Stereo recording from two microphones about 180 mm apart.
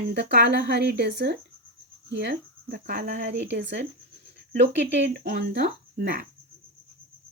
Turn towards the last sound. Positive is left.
turn(degrees=-55)  # may be behind; listen again after turning